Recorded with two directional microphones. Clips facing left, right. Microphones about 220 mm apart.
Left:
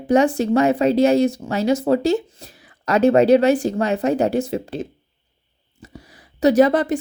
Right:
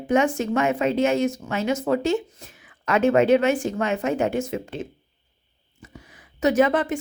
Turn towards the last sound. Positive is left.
turn(degrees=35)  # may be behind; listen again after turning